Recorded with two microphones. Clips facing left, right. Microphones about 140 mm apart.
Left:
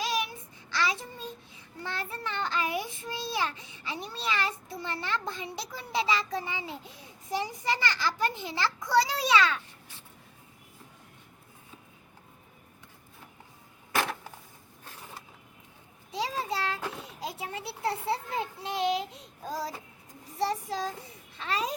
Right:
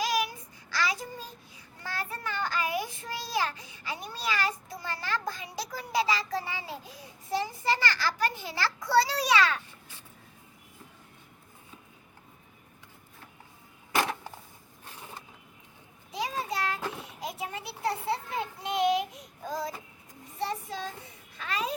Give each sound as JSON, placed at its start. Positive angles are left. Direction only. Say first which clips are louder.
{"t": 0.0, "sound": "child singing", "louder": "right 2 dB", "side_deg": 25}
{"t": 1.9, "sound": "a child's voice", "louder": "right 1 dB", "side_deg": 25}
{"t": 16.1, "sound": "a sound", "louder": "left 1 dB", "side_deg": 30}
{"t": 20.4, "sound": "child singing", "louder": "left 3 dB", "side_deg": 35}
{"t": 21.3, "sound": "babbling", "louder": "left 1 dB", "side_deg": 30}